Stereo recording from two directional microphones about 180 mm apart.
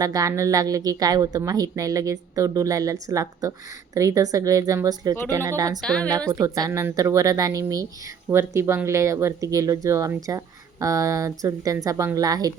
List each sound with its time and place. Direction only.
0.0 s speech: 20° right (ahead or behind)
5.8 s a woman's voice: 5° left (ahead or behind)
6.4 s speech: 20° right (ahead or behind)